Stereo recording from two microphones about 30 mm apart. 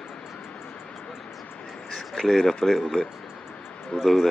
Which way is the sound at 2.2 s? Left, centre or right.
Centre.